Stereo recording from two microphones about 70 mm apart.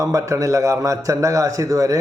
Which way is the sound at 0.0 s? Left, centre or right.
Right.